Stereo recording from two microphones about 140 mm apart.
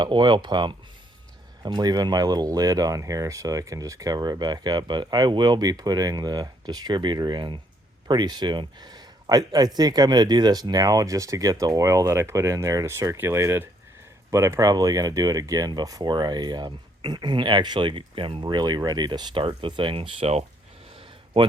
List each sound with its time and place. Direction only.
0.0 s speech: 35° right (ahead or behind)